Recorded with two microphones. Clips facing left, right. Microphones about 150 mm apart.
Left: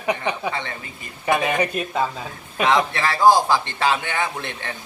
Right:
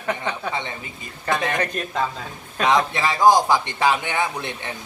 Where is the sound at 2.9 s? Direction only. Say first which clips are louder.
Even; 15° right (ahead or behind).